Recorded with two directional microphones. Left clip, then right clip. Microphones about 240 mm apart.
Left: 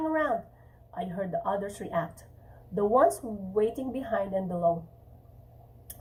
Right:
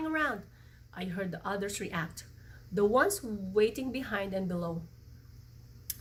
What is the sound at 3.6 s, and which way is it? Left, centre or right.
Speech, right.